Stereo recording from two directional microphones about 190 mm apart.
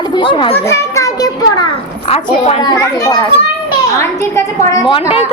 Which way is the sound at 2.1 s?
30° left (ahead or behind).